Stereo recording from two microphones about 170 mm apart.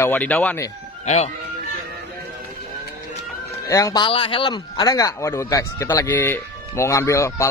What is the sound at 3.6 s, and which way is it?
Speech, 20° left (ahead or behind).